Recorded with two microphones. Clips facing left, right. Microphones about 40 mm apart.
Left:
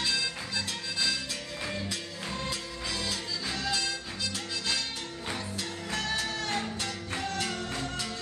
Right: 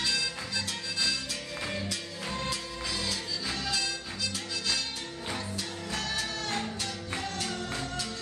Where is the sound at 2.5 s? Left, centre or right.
Left.